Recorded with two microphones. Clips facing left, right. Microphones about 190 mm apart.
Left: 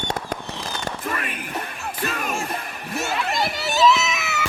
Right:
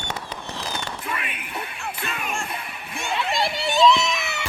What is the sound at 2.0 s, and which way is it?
Music, 45° left (ahead or behind).